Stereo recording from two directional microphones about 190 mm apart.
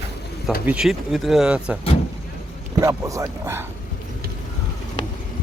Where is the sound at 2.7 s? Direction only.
15° right (ahead or behind).